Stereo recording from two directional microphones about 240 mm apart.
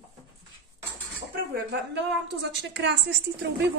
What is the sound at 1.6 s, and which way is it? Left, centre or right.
A woman's voice, right.